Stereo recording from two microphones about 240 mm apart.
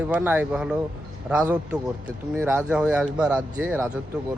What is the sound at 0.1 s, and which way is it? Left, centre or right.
A man's voice, centre.